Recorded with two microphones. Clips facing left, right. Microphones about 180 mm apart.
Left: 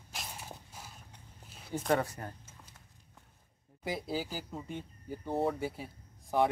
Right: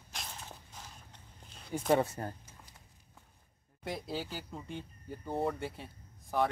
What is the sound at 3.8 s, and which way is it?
Speech, 5° left (ahead or behind).